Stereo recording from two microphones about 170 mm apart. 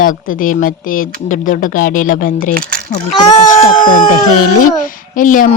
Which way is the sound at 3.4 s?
25° left (ahead or behind).